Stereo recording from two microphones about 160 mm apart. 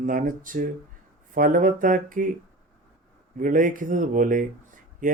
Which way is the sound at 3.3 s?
55° right (ahead or behind).